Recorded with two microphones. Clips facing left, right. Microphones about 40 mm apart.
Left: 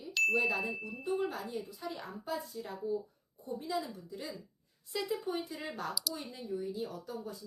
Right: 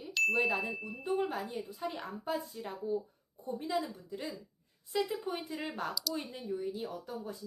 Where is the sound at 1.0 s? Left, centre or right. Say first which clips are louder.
Right 1 dB; right.